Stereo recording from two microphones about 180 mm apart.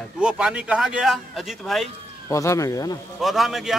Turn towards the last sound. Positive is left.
turn(degrees=0)  # may be behind; listen again after turning